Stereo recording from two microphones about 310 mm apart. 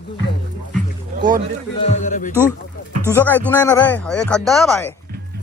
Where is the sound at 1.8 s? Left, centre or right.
Left.